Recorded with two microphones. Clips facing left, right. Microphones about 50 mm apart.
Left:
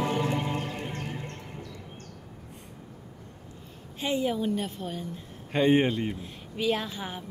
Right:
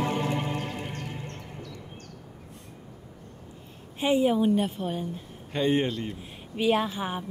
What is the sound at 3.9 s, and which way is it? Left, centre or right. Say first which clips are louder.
Speech: right 5 dB; centre.